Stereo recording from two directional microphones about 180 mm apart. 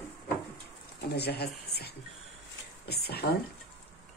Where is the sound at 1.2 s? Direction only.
65° left (ahead or behind).